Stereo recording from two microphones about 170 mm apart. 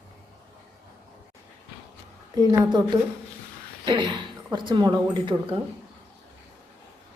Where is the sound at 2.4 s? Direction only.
25° right (ahead or behind).